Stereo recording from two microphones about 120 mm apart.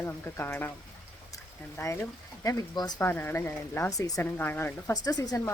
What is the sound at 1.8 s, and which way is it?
Speech, 25° left (ahead or behind).